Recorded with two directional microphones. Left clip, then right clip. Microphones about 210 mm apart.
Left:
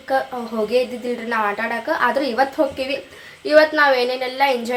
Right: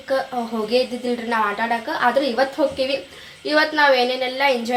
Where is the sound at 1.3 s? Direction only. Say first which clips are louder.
Even; 5° right (ahead or behind).